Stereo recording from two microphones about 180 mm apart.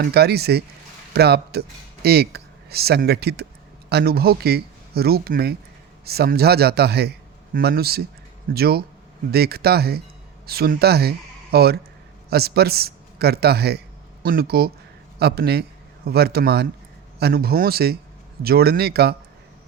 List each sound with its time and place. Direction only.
0.0 s a man's voice: 65° right (ahead or behind)